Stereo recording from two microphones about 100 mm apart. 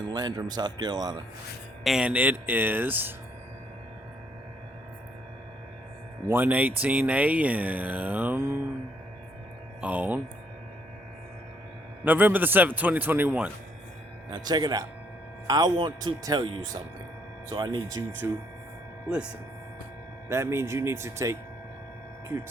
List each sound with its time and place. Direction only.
0.1 s speech: 45° right (ahead or behind)
1.8 s speech: 5° right (ahead or behind)
6.2 s speech: 20° right (ahead or behind)
9.8 s speech: 15° right (ahead or behind)
12.0 s speech: 20° right (ahead or behind)
14.3 s speech: 45° right (ahead or behind)
17.5 s speech: 45° right (ahead or behind)
18.2 s speech: 25° right (ahead or behind)
19.0 s speech: 10° right (ahead or behind)
20.3 s speech: 25° right (ahead or behind)